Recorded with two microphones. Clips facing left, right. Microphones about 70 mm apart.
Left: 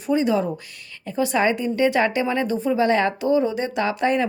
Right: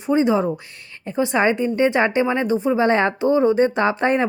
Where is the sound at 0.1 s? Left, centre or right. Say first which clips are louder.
Right 3 dB; right.